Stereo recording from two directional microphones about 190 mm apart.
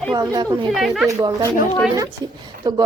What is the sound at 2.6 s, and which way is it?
Speech, 20° right (ahead or behind).